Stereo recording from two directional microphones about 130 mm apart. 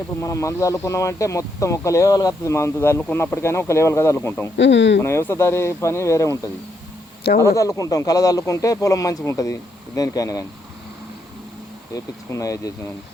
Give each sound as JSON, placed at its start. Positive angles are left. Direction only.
{"t": 0.2, "sound": "speech", "side_deg": 25}
{"t": 7.5, "sound": "speech", "side_deg": 25}
{"t": 11.9, "sound": "speech", "side_deg": 25}